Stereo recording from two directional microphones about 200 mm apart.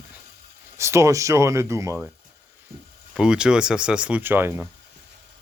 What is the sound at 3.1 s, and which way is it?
Speech, 5° right (ahead or behind).